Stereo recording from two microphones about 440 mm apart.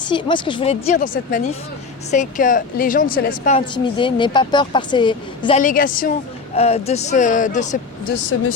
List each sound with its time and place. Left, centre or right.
0.0 s a woman's voice: centre